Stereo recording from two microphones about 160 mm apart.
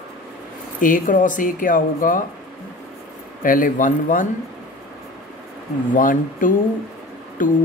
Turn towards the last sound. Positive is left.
turn(degrees=55)  # may be behind; listen again after turning